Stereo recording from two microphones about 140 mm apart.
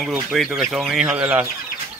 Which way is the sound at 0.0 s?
Centre (ahead or behind).